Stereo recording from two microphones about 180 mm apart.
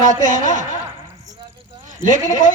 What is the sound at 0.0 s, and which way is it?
Speech, 45° right (ahead or behind).